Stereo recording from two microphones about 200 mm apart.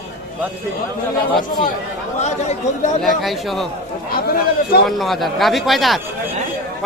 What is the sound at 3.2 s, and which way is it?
Speech, centre (ahead or behind).